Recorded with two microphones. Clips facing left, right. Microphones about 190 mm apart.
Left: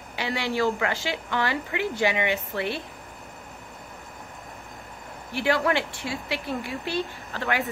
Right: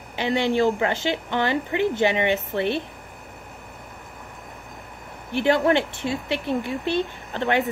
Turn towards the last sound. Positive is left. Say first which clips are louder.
# right 5 dB
turn(degrees=-20)  # may be behind; listen again after turning